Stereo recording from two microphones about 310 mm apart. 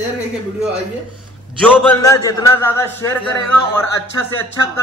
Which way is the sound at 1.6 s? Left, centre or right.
Centre.